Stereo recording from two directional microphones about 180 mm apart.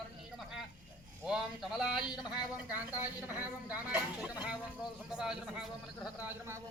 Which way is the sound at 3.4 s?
5° right (ahead or behind).